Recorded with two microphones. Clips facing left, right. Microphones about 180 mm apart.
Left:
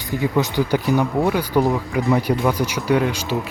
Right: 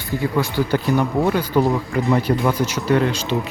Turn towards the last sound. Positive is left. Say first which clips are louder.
# right 1 dB
turn(degrees=10)  # may be behind; listen again after turning